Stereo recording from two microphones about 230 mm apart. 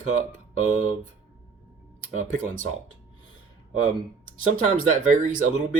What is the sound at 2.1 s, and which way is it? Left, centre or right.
Speech, right.